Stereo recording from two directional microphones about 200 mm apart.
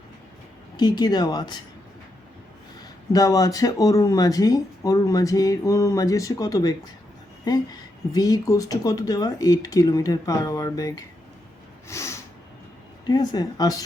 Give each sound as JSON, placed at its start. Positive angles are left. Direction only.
{"t": 0.8, "sound": "speech", "side_deg": 20}
{"t": 3.1, "sound": "speech", "side_deg": 15}
{"t": 11.9, "sound": "snort", "side_deg": 15}
{"t": 13.1, "sound": "speech", "side_deg": 20}